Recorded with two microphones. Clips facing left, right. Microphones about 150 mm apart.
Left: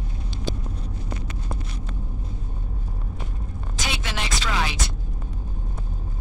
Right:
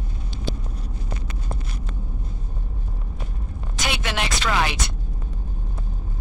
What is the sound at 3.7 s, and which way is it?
Music, 65° right (ahead or behind).